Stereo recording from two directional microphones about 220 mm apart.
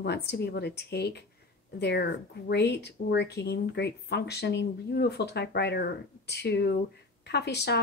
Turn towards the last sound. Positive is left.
turn(degrees=50)  # may be behind; listen again after turning